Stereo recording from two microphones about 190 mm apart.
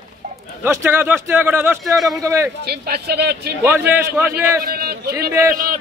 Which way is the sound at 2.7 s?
55° right (ahead or behind).